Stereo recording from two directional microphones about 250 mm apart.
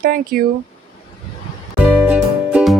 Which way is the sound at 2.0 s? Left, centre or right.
Centre.